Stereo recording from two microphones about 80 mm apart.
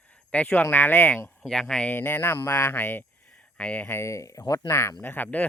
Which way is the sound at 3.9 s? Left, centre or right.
Left.